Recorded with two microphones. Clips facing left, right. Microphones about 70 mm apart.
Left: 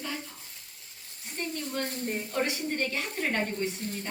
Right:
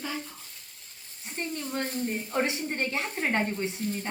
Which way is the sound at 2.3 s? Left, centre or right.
Right.